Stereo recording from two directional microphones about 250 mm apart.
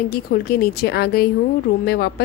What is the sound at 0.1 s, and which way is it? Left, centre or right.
A woman's voice, left.